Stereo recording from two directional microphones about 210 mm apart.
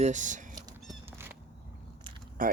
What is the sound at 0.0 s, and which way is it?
Speech, 35° right (ahead or behind).